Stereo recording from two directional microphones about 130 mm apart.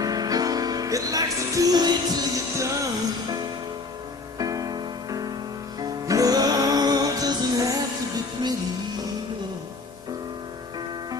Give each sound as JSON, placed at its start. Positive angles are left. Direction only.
{"t": 0.0, "sound": "music", "side_deg": -30}
{"t": 4.4, "sound": "music", "side_deg": -30}